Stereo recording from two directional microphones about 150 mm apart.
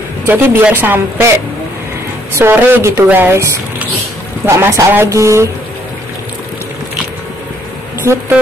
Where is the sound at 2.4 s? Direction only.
15° right (ahead or behind).